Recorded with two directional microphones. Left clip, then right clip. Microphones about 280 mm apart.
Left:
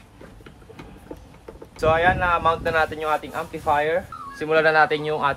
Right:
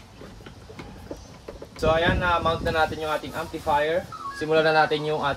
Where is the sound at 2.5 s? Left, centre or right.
Left.